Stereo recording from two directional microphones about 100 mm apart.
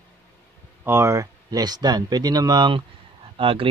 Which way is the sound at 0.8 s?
25° right (ahead or behind).